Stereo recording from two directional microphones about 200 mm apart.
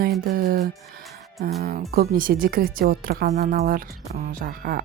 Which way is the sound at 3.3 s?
35° right (ahead or behind).